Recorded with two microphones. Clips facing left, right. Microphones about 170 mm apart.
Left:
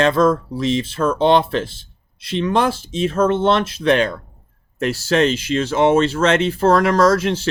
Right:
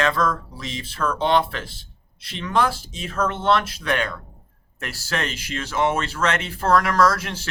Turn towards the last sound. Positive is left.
turn(degrees=25)  # may be behind; listen again after turning